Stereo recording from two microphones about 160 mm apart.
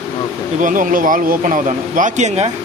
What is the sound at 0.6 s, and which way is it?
Speech, 55° right (ahead or behind).